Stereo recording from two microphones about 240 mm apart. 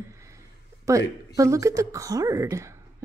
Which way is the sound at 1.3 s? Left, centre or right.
Centre.